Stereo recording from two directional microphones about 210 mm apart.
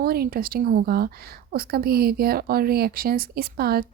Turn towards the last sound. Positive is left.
turn(degrees=-45)  # may be behind; listen again after turning